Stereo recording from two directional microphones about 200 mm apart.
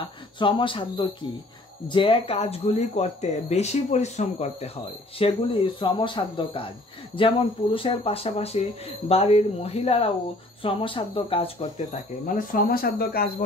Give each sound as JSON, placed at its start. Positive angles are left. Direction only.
{"t": 0.4, "sound": "speech", "side_deg": 25}
{"t": 12.4, "sound": "speech", "side_deg": 45}